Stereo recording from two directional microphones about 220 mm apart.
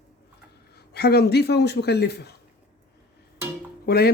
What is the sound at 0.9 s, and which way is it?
Speech, 45° left (ahead or behind).